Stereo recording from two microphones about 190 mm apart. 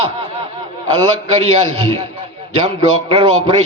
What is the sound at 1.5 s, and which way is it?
Speech, 30° right (ahead or behind).